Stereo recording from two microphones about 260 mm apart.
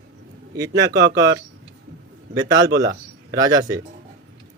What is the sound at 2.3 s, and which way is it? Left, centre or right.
Speech, centre.